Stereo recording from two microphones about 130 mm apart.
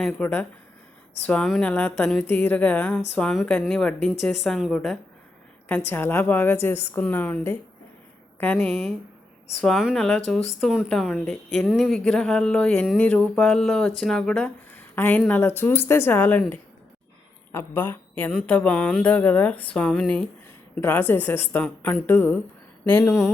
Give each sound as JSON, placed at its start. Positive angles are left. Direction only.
{"t": 0.0, "sound": "a woman's voice", "side_deg": 10}
{"t": 5.6, "sound": "a woman's voice", "side_deg": 15}
{"t": 17.5, "sound": "a woman's voice", "side_deg": 15}